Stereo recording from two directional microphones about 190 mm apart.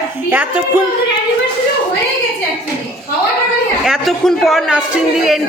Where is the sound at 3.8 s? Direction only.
Centre (ahead or behind).